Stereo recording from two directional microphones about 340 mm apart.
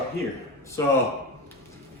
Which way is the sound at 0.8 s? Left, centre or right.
Centre.